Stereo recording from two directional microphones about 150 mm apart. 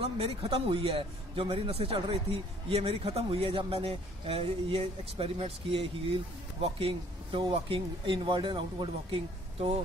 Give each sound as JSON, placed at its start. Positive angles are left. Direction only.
{"t": 0.0, "sound": "a man's voice", "side_deg": -40}